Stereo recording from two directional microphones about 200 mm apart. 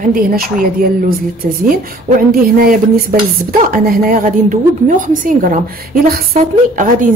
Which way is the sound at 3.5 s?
45° right (ahead or behind).